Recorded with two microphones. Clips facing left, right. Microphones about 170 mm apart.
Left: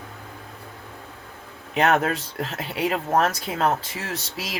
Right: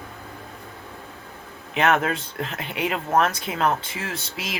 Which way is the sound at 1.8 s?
40° left (ahead or behind).